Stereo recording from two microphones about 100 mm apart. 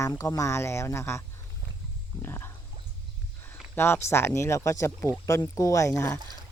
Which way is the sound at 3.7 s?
25° left (ahead or behind).